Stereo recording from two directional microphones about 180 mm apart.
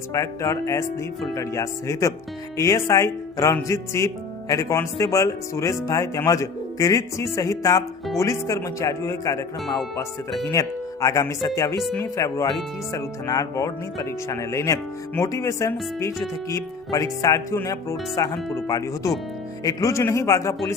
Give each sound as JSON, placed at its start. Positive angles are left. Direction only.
{"t": 0.1, "sound": "speech", "side_deg": 15}